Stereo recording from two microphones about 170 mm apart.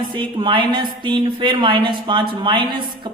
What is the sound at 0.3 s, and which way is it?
A man's voice, 30° right (ahead or behind).